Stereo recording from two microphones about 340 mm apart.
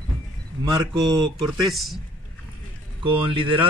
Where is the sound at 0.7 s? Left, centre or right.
Centre.